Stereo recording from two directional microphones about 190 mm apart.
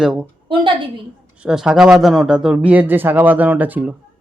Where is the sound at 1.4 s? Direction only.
5° right (ahead or behind).